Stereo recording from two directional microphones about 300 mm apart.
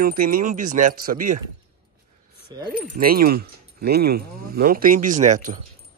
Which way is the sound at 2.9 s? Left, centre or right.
Right.